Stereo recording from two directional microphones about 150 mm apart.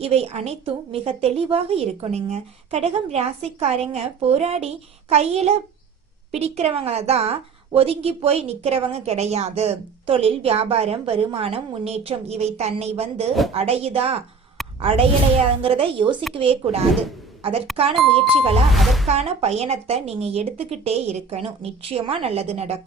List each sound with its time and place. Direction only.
0.0 s a woman's voice: 45° right (ahead or behind)
17.9 s speech: centre (ahead or behind)
19.0 s a woman's voice: 45° right (ahead or behind)